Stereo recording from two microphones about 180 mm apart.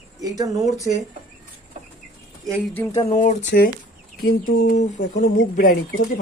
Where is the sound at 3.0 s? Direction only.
40° left (ahead or behind).